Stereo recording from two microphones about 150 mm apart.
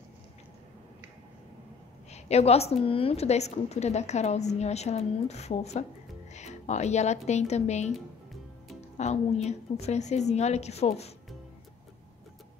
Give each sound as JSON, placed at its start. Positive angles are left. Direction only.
{"t": 2.0, "sound": "a woman's voice", "side_deg": 45}
{"t": 8.9, "sound": "a woman's voice", "side_deg": 45}